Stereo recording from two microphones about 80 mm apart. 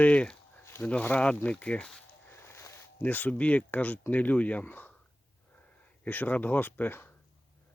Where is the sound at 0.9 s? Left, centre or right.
Centre.